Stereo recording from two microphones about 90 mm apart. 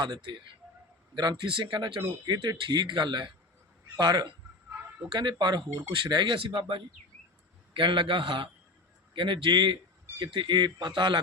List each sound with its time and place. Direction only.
0.0 s speech: 60° right (ahead or behind)
2.2 s speech: 50° right (ahead or behind)
5.4 s a man's voice: 55° right (ahead or behind)